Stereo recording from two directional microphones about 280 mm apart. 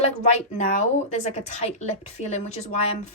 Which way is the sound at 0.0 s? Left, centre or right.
Left.